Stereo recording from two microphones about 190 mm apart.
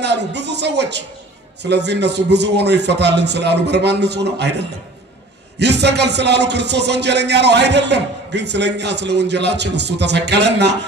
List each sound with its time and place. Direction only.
0.0 s speech: 65° right (ahead or behind)